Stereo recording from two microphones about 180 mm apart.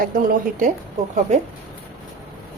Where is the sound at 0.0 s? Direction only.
50° right (ahead or behind).